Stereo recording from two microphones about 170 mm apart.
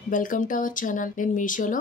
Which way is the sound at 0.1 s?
50° left (ahead or behind).